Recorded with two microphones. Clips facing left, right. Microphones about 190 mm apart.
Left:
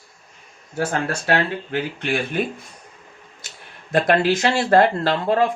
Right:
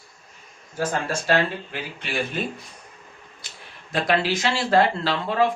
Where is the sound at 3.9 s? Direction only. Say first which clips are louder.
Left 5 dB; 50° left (ahead or behind).